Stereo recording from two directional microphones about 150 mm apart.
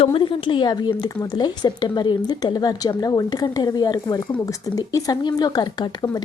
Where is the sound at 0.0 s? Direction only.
35° left (ahead or behind).